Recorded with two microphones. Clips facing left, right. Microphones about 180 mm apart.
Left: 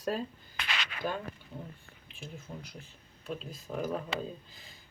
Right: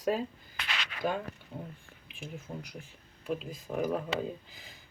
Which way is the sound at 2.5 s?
25° right (ahead or behind).